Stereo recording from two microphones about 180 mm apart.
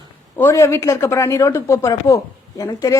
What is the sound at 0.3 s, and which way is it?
A woman's voice, 15° left (ahead or behind).